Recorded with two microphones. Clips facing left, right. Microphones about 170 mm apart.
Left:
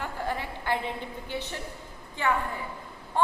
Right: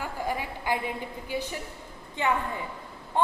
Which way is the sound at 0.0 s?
10° right (ahead or behind).